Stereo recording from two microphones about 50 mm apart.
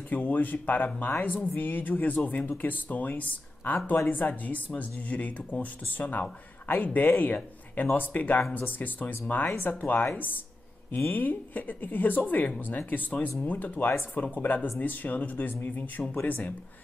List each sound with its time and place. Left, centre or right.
0.1 s speech: left
11.1 s speech: left